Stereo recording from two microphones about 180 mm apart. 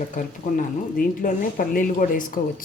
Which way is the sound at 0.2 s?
50° left (ahead or behind).